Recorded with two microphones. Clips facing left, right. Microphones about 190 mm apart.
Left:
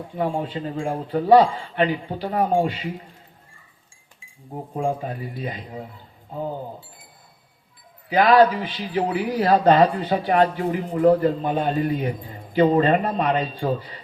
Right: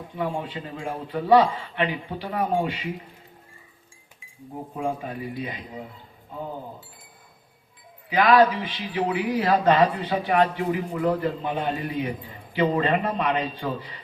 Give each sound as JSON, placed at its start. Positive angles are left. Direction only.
{"t": 0.2, "sound": "speech", "side_deg": 40}
{"t": 4.8, "sound": "speech", "side_deg": 40}
{"t": 8.1, "sound": "speech", "side_deg": 40}